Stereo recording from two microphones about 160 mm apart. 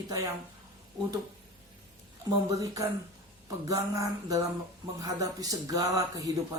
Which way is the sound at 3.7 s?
20° right (ahead or behind).